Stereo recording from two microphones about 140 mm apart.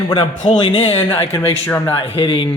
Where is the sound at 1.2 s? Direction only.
15° left (ahead or behind).